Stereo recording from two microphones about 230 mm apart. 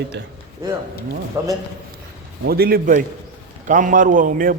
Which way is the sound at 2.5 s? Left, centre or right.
Right.